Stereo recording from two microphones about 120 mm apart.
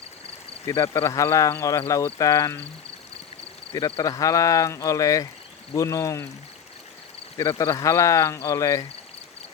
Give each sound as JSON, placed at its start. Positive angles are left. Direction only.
{"t": 0.8, "sound": "speech", "side_deg": 25}
{"t": 3.8, "sound": "speech", "side_deg": 30}
{"t": 7.3, "sound": "speech", "side_deg": 30}